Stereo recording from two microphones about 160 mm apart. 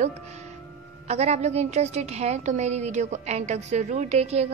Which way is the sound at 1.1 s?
45° right (ahead or behind).